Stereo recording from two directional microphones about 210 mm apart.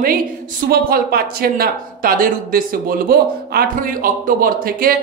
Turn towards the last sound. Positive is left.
turn(degrees=-45)  # may be behind; listen again after turning